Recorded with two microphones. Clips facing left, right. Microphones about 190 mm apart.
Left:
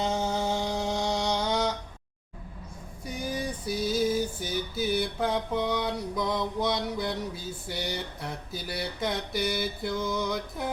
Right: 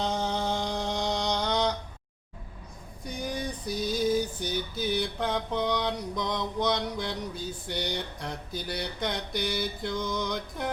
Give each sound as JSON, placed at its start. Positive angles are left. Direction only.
{"t": 0.0, "sound": "a sound", "side_deg": 5}
{"t": 3.1, "sound": "female singing", "side_deg": 5}
{"t": 4.1, "sound": "mantra", "side_deg": 5}